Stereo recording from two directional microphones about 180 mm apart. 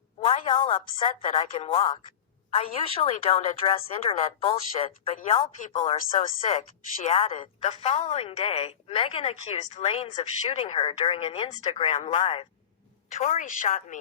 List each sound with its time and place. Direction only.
1.2 s a woman's voice: 40° left (ahead or behind)